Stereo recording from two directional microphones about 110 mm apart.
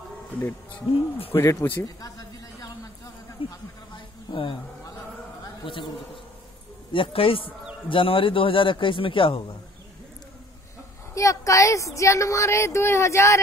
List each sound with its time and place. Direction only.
0.3 s speech: 15° left (ahead or behind)
1.3 s a sound: 25° left (ahead or behind)
3.4 s a man's voice: 55° left (ahead or behind)
3.9 s a sound: 50° left (ahead or behind)
6.9 s a man's voice: 55° left (ahead or behind)
11.1 s a woman's voice: 30° left (ahead or behind)